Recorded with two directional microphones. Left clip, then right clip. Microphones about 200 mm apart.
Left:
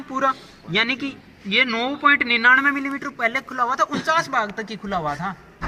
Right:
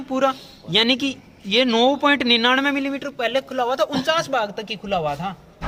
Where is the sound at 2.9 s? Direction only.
50° right (ahead or behind).